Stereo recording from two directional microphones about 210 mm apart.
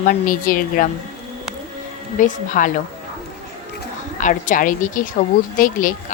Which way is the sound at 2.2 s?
40° left (ahead or behind).